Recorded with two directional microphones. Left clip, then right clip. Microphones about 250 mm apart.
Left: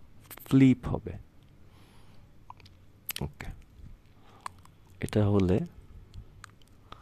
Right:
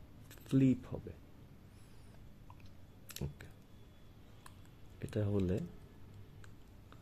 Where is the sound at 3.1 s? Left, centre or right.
Left.